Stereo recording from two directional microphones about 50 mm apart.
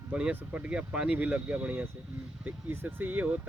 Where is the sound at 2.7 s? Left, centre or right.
Right.